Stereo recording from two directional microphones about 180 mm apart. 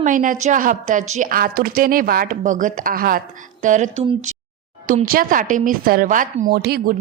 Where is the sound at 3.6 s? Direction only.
40° right (ahead or behind); by 7.0 s 60° right (ahead or behind).